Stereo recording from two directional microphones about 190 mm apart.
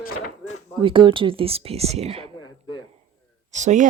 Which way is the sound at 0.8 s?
25° right (ahead or behind).